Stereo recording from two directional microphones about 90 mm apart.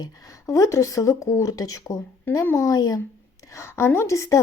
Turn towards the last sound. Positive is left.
turn(degrees=35)  # may be behind; listen again after turning